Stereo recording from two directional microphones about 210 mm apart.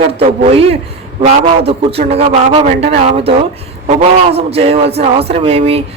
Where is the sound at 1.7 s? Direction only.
30° right (ahead or behind).